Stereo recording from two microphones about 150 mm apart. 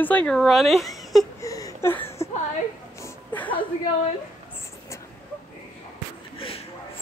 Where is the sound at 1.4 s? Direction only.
20° left (ahead or behind).